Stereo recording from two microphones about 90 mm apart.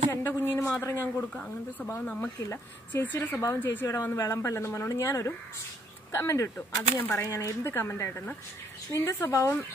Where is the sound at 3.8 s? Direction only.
30° left (ahead or behind).